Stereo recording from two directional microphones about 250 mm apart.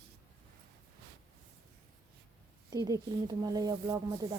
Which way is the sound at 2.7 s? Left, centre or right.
Centre.